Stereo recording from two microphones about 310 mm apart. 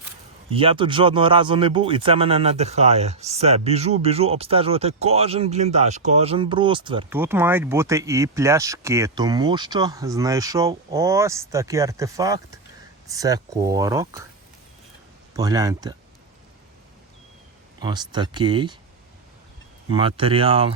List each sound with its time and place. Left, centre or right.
0.5 s speech: centre
15.3 s speech: centre
17.7 s speech: centre
19.9 s speech: centre